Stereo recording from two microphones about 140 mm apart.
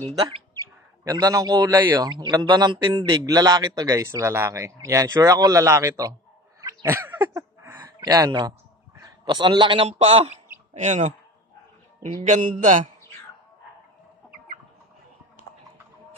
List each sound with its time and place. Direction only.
1.0 s speech: 25° right (ahead or behind)
6.6 s a sound: 20° right (ahead or behind)
7.8 s a man's voice: 30° right (ahead or behind); by 10.3 s 45° right (ahead or behind)
10.7 s speech: 55° right (ahead or behind)